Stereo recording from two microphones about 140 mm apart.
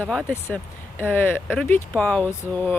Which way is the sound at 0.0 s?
5° left (ahead or behind).